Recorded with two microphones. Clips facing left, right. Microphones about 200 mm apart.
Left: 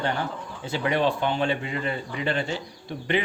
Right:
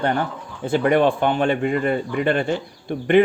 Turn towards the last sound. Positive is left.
turn(degrees=-55)  # may be behind; listen again after turning